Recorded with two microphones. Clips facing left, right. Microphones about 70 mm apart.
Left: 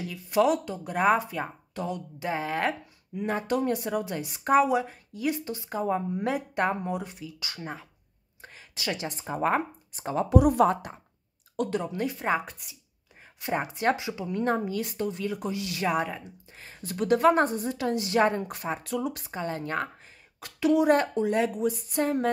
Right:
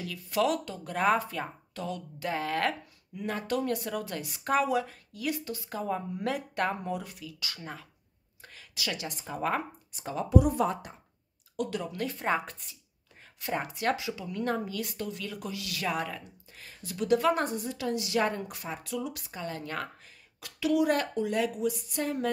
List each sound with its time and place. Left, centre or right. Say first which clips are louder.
0.0 s speech: left 4 dB; left
10.4 s speech: left 6 dB; left
11.5 s speech: left 4 dB; left
11.8 s speech: left 4 dB; left
12.2 s speech: right 1 dB; centre
13.4 s speech: left 3 dB; left
16.8 s a woman's voice: left 4 dB; left